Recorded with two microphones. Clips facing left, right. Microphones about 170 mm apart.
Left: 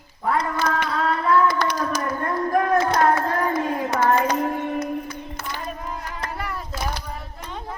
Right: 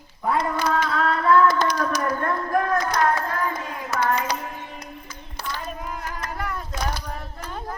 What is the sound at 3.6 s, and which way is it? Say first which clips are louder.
Hands: left 5 dB; 35° left (ahead or behind).